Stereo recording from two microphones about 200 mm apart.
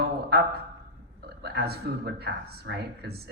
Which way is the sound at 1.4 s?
50° right (ahead or behind).